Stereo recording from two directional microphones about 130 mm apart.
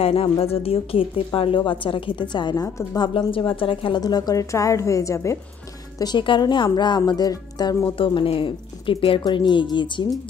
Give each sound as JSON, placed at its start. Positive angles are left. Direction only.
{"t": 0.0, "sound": "speech", "side_deg": 45}
{"t": 3.1, "sound": "speech", "side_deg": 45}
{"t": 4.0, "sound": "a woman's voice", "side_deg": 30}
{"t": 5.9, "sound": "speech", "side_deg": 35}